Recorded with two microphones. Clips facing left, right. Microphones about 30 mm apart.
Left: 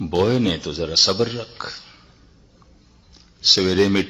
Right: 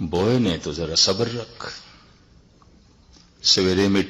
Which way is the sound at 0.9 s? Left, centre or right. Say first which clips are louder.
Left 2 dB; centre.